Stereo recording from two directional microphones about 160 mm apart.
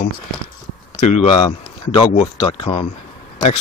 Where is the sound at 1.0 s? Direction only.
40° left (ahead or behind).